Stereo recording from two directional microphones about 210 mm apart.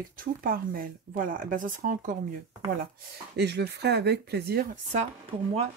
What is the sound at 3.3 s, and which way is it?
Speech, 50° right (ahead or behind).